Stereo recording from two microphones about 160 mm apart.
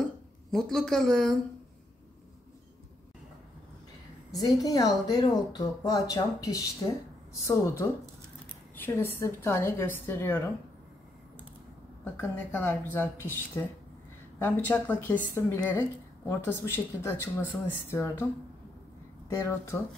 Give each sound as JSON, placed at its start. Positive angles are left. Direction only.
{"t": 0.5, "sound": "speech", "side_deg": 0}
{"t": 4.4, "sound": "speech", "side_deg": 25}
{"t": 12.0, "sound": "speech", "side_deg": 15}
{"t": 14.4, "sound": "speech", "side_deg": 10}
{"t": 19.2, "sound": "speech", "side_deg": 15}